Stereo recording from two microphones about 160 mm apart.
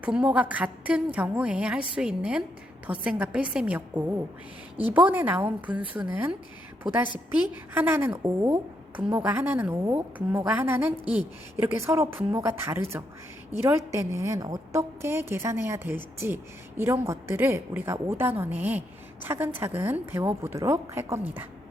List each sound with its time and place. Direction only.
0.0 s a woman's voice: 5° right (ahead or behind)
7.7 s a woman's voice: 15° right (ahead or behind)